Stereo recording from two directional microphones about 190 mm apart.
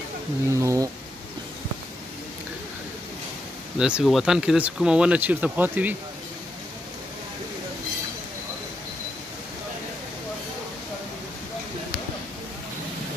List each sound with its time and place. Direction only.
0.5 s speech: 15° right (ahead or behind)
3.7 s speech: 5° right (ahead or behind)